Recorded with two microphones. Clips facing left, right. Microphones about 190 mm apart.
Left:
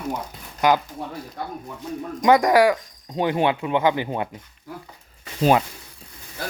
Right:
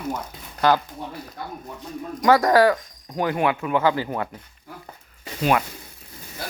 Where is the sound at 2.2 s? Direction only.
15° left (ahead or behind).